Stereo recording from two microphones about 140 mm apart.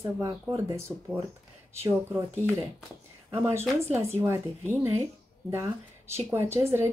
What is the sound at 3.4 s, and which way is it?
Speech, 20° right (ahead or behind).